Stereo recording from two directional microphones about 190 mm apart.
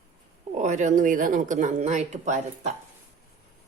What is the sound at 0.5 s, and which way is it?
Speech, 40° right (ahead or behind).